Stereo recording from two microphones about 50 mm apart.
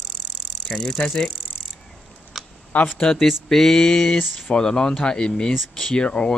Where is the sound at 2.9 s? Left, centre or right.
Centre.